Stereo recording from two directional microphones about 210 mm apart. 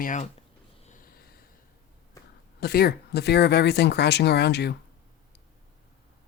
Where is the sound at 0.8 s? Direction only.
35° left (ahead or behind).